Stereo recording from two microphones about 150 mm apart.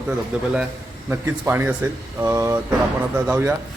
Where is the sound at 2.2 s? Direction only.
20° right (ahead or behind).